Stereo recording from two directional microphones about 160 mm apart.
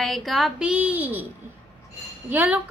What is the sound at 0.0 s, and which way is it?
Speech, centre (ahead or behind).